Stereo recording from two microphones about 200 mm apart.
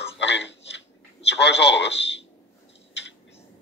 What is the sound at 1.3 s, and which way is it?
Speech, 60° left (ahead or behind).